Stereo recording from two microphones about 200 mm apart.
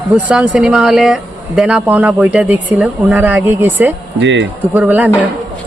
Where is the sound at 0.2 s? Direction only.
5° right (ahead or behind).